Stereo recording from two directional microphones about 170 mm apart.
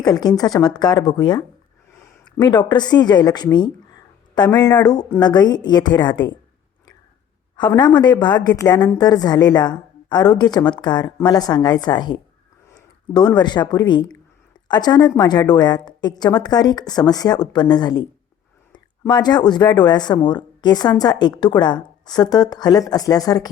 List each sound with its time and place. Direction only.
0.0 s a woman's voice: 25° left (ahead or behind)
2.4 s a woman's voice: 25° left (ahead or behind)
7.5 s a woman's voice: 25° left (ahead or behind)